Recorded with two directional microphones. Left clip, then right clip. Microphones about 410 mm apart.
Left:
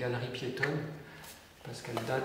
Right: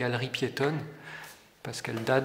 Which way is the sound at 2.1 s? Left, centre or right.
Right.